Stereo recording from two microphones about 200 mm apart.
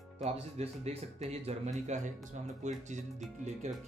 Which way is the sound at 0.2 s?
30° right (ahead or behind).